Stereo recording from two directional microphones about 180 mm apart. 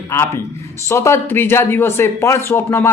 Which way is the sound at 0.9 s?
15° left (ahead or behind).